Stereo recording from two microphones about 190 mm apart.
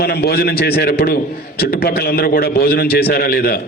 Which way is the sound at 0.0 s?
55° left (ahead or behind).